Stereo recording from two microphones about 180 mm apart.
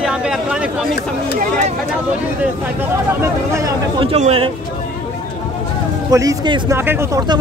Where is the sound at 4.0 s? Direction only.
35° right (ahead or behind).